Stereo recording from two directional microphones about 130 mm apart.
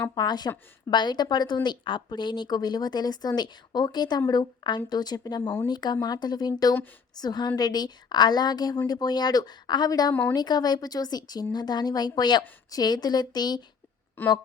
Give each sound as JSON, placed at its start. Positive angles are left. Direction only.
{"t": 0.1, "sound": "speech", "side_deg": 35}
{"t": 5.4, "sound": "speech", "side_deg": 20}
{"t": 5.6, "sound": "speech", "side_deg": 35}
{"t": 14.2, "sound": "a woman's voice", "side_deg": 15}